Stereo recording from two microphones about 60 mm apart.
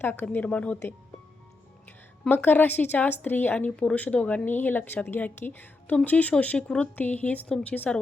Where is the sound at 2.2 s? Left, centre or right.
Left.